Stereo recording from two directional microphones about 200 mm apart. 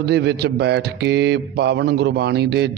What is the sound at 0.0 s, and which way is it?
A man's voice, 55° right (ahead or behind).